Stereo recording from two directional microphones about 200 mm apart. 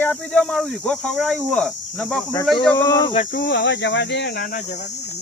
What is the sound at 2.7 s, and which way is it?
Speech, 15° left (ahead or behind).